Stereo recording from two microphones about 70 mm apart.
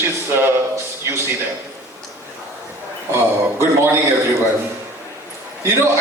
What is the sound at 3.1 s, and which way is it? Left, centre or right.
Speech, right.